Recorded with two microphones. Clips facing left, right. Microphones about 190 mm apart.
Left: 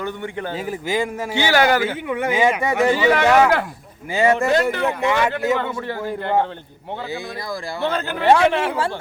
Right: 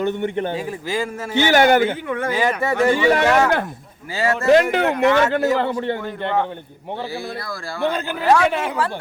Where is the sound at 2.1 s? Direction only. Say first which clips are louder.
Left 2 dB; 10° left (ahead or behind).